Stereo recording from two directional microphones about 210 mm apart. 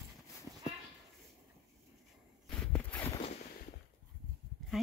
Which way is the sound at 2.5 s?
5° left (ahead or behind).